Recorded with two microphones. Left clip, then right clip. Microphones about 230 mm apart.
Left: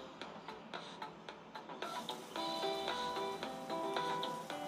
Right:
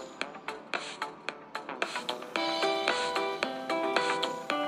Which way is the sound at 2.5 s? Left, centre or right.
Right.